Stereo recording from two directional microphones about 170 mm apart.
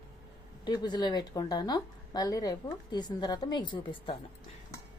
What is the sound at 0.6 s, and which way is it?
A woman's voice, 25° left (ahead or behind).